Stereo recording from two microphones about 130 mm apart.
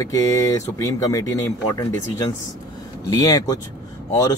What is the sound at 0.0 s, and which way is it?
Speech, 25° left (ahead or behind).